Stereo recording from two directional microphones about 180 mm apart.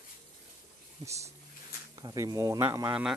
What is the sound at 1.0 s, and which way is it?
A man's voice, 15° right (ahead or behind).